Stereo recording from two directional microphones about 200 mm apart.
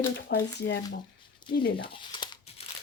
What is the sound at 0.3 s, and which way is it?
Speech, 55° left (ahead or behind).